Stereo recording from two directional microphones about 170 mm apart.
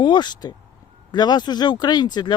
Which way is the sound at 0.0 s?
25° left (ahead or behind).